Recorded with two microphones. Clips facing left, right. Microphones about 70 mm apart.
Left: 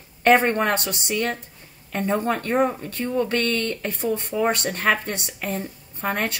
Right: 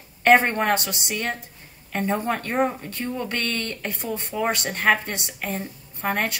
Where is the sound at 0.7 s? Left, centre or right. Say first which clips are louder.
Left 1 dB; left.